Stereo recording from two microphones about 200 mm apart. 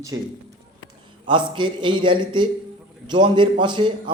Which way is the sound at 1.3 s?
25° right (ahead or behind).